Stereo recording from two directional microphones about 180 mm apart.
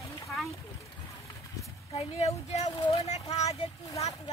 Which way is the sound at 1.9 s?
35° left (ahead or behind).